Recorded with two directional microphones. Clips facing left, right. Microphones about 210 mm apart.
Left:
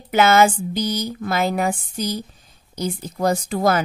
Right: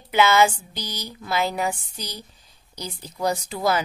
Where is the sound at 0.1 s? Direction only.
45° left (ahead or behind).